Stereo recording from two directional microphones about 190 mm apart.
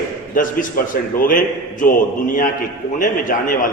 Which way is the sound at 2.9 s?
45° left (ahead or behind).